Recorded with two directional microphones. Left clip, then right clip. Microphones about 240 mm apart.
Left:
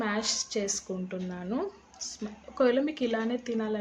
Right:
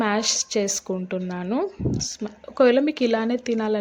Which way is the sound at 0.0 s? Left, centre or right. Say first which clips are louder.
Right 8 dB; right.